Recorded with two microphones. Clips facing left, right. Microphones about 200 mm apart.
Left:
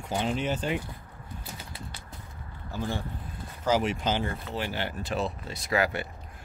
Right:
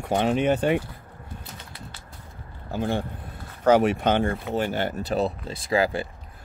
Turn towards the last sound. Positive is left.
turn(degrees=-30)  # may be behind; listen again after turning